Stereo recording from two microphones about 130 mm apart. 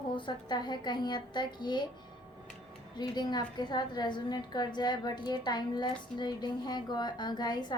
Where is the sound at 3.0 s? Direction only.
35° left (ahead or behind).